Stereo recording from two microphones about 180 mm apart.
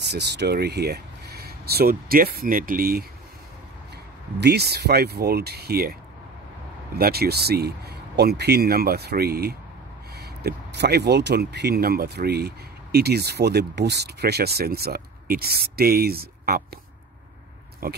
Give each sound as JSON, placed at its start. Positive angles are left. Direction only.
{"t": 0.1, "sound": "speech", "side_deg": -70}
{"t": 4.4, "sound": "speech", "side_deg": -65}
{"t": 7.0, "sound": "speech", "side_deg": -60}
{"t": 17.8, "sound": "speech", "side_deg": -55}